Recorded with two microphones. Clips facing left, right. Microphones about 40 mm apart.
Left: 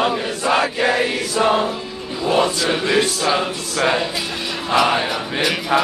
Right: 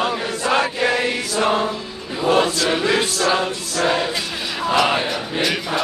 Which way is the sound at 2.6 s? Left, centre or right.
Centre.